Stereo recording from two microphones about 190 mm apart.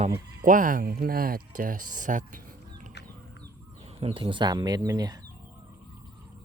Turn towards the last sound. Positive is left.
turn(degrees=-20)  # may be behind; listen again after turning